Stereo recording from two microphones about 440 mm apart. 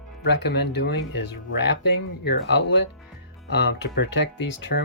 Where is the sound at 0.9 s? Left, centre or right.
Left.